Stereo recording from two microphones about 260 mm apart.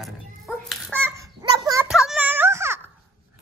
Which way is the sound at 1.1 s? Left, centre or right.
Centre.